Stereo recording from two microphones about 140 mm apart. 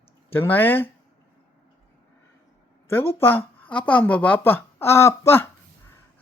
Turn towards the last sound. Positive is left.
turn(degrees=15)  # may be behind; listen again after turning